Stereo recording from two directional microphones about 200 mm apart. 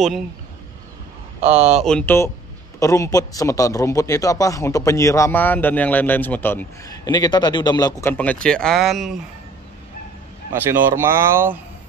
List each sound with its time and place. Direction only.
1.8 s a man's voice: 5° left (ahead or behind)
7.1 s a man's voice: 20° left (ahead or behind); by 9.2 s centre (ahead or behind)
10.5 s speech: 10° right (ahead or behind)